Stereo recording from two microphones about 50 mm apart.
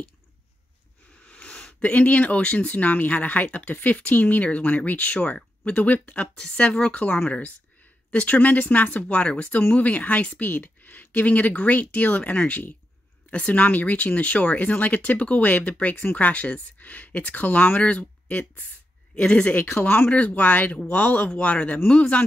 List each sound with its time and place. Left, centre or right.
1.2 s wheeze: left
1.8 s speech: left
6.3 s speech: centre; by 9.0 s left
9.0 s speech: left
9.6 s speech: left
19.8 s speech: left
20.1 s speech: left